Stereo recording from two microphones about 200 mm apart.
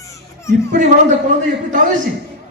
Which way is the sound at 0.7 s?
35° right (ahead or behind).